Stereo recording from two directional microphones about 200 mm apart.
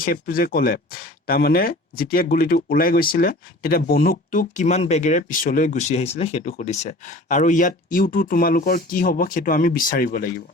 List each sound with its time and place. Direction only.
0.0 s speech: 45° left (ahead or behind)